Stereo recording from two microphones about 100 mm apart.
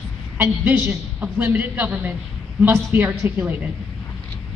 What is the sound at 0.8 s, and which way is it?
A woman's voice, 15° right (ahead or behind).